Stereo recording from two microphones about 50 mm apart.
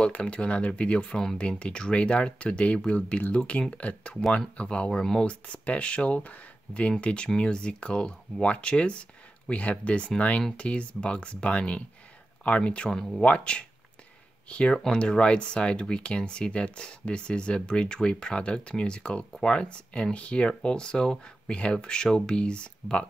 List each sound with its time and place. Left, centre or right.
0.0 s speech: left
12.9 s speech: centre
13.2 s speech: left